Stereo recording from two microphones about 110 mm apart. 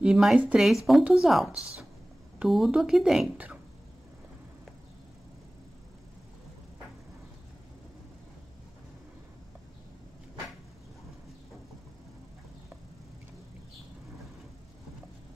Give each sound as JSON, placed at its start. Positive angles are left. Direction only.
{"t": 0.0, "sound": "speech", "side_deg": -5}
{"t": 1.5, "sound": "a woman's voice", "side_deg": 30}
{"t": 2.3, "sound": "speech", "side_deg": -5}